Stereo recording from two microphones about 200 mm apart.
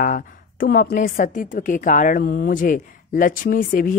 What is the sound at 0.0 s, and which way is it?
A woman's voice, 45° left (ahead or behind).